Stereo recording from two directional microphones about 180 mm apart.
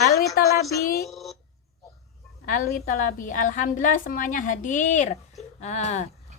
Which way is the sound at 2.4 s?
50° left (ahead or behind).